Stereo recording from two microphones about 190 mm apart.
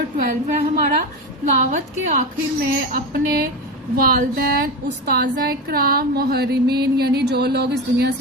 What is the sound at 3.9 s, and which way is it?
A woman's voice, 45° right (ahead or behind).